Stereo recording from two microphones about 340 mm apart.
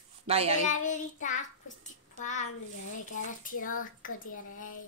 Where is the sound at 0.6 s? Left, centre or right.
Left.